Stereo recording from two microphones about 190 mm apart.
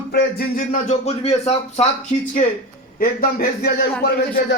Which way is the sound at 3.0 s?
50° left (ahead or behind).